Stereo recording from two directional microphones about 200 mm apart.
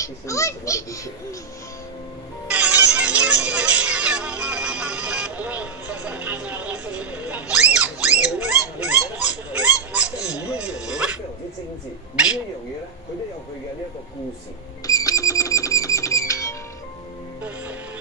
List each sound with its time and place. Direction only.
0.0 s speech: 15° left (ahead or behind)
2.4 s music: 5° right (ahead or behind)
14.9 s music: 15° left (ahead or behind)